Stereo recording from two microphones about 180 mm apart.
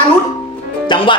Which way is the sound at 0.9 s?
25° left (ahead or behind).